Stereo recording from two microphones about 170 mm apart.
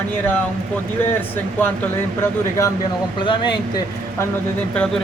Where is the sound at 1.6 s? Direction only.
10° left (ahead or behind).